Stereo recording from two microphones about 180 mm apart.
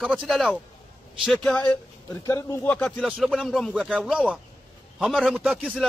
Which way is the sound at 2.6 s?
5° left (ahead or behind).